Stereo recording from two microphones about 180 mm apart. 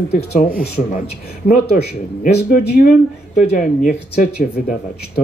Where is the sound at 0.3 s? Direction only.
55° left (ahead or behind).